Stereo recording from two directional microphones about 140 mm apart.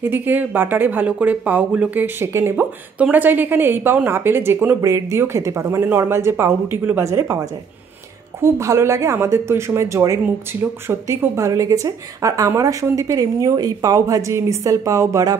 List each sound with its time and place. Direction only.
0.1 s speech: 15° right (ahead or behind)